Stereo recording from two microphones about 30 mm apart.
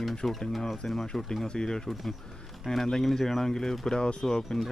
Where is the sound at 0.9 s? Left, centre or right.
Left.